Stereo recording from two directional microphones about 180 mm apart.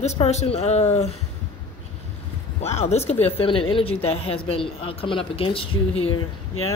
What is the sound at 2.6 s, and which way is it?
Speech, 40° left (ahead or behind).